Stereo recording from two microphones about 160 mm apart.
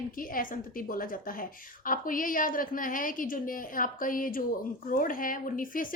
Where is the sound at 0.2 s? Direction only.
60° left (ahead or behind).